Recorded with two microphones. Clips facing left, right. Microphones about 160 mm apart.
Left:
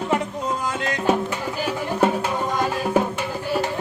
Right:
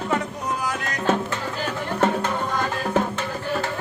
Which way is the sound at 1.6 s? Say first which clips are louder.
Left 2 dB; 10° left (ahead or behind).